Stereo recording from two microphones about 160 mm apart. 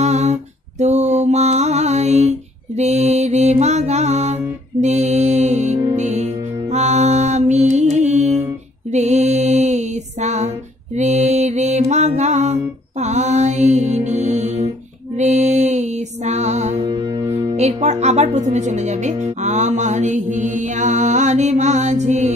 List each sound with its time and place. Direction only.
0.0 s mantra: 45° right (ahead or behind)
5.9 s music: 45° right (ahead or behind)
8.9 s mantra: 45° right (ahead or behind)
13.0 s music: 45° right (ahead or behind)